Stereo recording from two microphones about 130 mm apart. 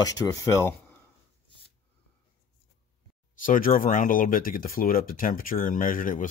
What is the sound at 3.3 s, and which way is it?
Speech, 90° left.